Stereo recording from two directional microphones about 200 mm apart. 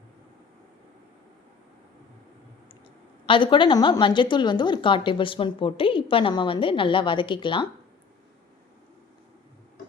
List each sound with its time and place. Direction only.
3.2 s a woman's voice: 25° left (ahead or behind)